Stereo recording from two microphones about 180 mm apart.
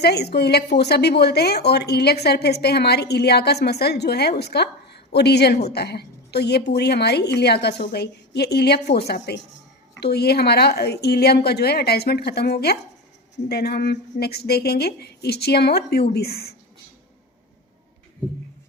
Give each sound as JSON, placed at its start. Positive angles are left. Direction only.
{"t": 0.0, "sound": "a woman's voice", "side_deg": 65}